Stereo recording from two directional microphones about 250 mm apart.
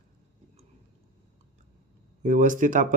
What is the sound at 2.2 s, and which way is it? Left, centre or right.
Speech, right.